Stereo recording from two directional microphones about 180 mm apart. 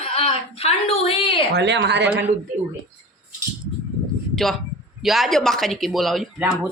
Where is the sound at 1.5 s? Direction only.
70° right (ahead or behind).